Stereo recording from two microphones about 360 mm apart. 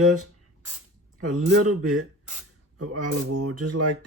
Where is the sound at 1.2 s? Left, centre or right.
Right.